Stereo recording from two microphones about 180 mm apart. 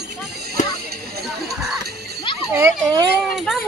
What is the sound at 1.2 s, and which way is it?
Music, centre (ahead or behind).